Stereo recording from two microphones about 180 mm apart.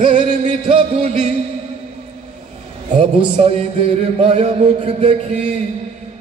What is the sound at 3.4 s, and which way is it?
Music, 35° right (ahead or behind).